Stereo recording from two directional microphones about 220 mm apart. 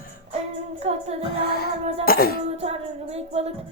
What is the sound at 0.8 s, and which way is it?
Music, 30° right (ahead or behind).